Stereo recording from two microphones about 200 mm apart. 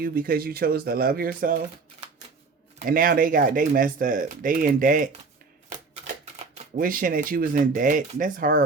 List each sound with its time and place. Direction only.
0.0 s speech: 50° right (ahead or behind)
2.7 s speech: 45° right (ahead or behind)
6.7 s speech: 45° right (ahead or behind)